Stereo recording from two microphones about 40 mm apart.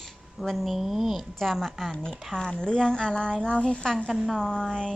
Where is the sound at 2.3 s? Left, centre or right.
Centre.